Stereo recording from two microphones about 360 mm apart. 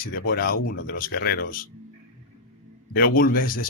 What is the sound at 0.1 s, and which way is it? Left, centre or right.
Speech, left.